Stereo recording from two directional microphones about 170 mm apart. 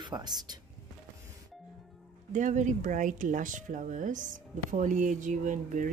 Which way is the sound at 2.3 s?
45° right (ahead or behind).